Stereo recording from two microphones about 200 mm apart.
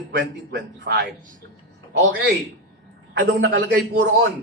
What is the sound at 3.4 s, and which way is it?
Speech, 55° right (ahead or behind).